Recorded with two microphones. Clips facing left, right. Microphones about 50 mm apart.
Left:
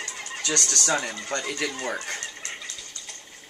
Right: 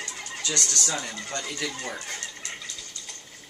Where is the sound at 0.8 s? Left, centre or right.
Left.